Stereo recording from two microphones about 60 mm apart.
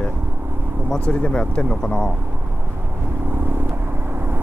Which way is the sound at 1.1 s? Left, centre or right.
Centre.